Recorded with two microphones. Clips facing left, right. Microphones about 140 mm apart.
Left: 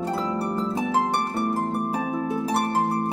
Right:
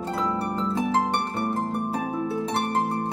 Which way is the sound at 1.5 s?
10° left (ahead or behind).